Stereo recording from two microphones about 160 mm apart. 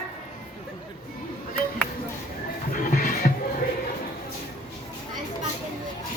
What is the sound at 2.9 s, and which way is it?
Music, 55° left (ahead or behind).